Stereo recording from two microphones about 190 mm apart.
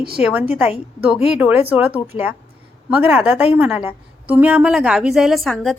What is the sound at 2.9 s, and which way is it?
A woman's voice, 5° right (ahead or behind).